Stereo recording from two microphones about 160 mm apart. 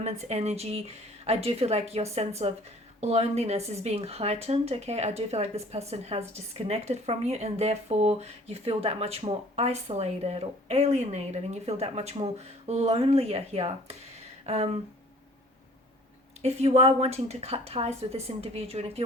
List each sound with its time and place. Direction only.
0.0 s speech: 45° right (ahead or behind)
14.4 s a sound: 40° right (ahead or behind)
16.4 s speech: 40° right (ahead or behind)